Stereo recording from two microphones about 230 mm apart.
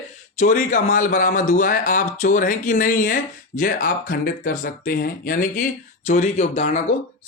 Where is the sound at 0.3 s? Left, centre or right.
Left.